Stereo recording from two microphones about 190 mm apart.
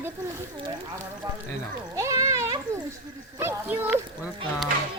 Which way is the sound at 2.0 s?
15° right (ahead or behind).